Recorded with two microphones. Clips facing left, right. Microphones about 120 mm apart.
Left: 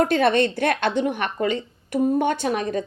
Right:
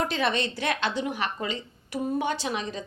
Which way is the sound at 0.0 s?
55° left (ahead or behind).